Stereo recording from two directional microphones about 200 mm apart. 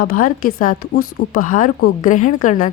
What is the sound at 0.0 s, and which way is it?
A woman's voice, 45° left (ahead or behind).